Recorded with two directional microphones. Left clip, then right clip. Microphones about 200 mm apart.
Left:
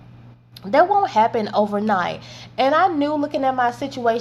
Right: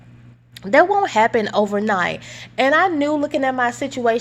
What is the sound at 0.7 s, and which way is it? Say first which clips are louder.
A woman's voice: right 1 dB; 35° right (ahead or behind).